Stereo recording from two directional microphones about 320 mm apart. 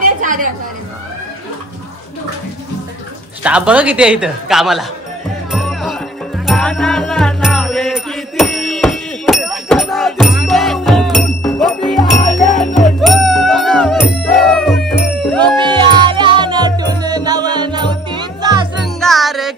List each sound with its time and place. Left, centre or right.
0.0 s chatter: right
3.4 s speech: centre
5.5 s music: centre
12.6 s music: left
13.0 s music: centre
15.3 s music: centre
18.9 s music: centre